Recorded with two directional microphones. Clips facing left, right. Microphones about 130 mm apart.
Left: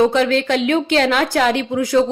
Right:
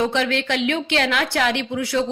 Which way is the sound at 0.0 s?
40° left (ahead or behind).